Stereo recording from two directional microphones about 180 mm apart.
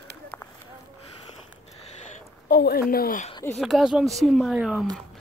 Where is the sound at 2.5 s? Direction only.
60° left (ahead or behind).